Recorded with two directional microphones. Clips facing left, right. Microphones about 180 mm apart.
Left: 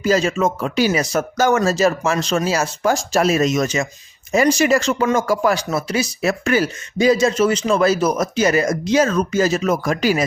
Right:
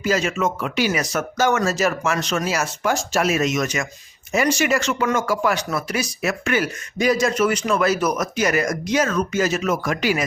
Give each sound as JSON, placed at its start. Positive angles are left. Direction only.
{"t": 0.0, "sound": "speech", "side_deg": 35}